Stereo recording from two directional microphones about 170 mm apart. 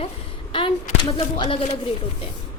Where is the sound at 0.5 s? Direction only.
30° left (ahead or behind).